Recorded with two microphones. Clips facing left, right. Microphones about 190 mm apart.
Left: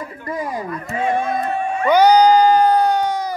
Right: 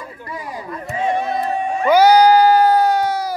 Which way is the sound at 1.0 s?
20° right (ahead or behind).